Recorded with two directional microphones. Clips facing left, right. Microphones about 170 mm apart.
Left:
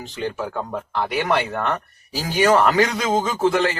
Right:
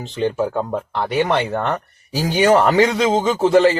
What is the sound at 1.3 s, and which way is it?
A man's voice, 25° right (ahead or behind).